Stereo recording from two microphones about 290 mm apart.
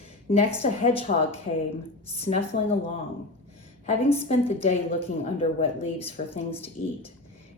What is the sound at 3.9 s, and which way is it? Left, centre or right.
A woman's voice, left.